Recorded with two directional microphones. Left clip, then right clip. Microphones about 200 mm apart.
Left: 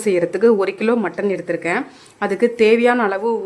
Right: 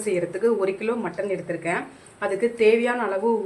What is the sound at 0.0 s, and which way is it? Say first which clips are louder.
Speech: left 8 dB; 55° left (ahead or behind).